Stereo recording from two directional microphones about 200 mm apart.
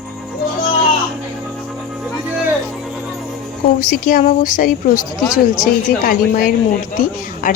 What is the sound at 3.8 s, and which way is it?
A woman's voice, 45° left (ahead or behind).